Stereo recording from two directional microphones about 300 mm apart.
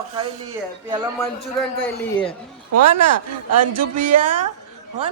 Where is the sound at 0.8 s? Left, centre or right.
Centre.